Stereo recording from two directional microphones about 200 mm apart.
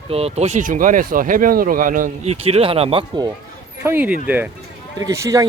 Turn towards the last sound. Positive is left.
turn(degrees=-15)  # may be behind; listen again after turning